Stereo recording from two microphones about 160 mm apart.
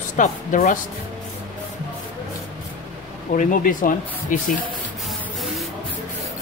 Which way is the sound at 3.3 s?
55° left (ahead or behind).